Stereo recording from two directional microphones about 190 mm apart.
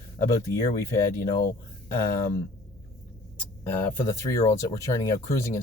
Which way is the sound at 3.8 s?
15° left (ahead or behind).